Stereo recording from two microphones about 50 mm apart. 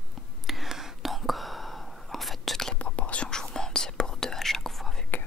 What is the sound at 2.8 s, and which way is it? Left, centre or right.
Whispering, left.